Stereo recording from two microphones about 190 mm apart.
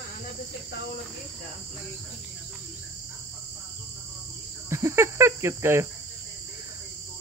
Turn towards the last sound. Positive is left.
turn(degrees=-15)  # may be behind; listen again after turning